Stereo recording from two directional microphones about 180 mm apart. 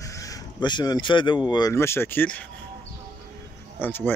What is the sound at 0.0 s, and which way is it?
Speech, 20° left (ahead or behind).